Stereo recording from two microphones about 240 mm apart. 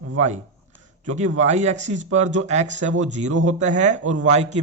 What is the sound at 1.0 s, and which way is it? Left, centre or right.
Speech, right.